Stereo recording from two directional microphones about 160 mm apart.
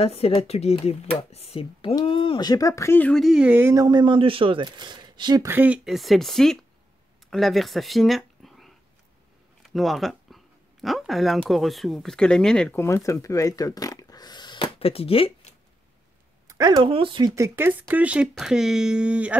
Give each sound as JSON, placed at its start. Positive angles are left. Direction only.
{"t": 0.0, "sound": "speech", "side_deg": 40}
{"t": 3.8, "sound": "speech", "side_deg": -30}
{"t": 5.5, "sound": "speech", "side_deg": -10}
{"t": 5.9, "sound": "speech", "side_deg": 0}
{"t": 12.7, "sound": "speech", "side_deg": 15}
{"t": 16.4, "sound": "speech", "side_deg": -25}
{"t": 17.4, "sound": "speech", "side_deg": -15}